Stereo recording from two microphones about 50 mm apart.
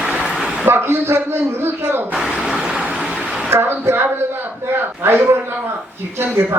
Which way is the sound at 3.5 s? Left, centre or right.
Right.